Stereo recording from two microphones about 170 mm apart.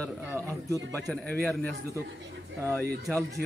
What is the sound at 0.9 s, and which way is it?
Speech, 10° left (ahead or behind).